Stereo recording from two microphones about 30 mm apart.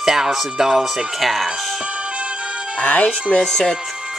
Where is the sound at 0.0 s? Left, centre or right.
Centre.